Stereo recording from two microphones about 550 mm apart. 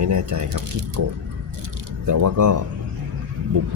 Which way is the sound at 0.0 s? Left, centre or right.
Right.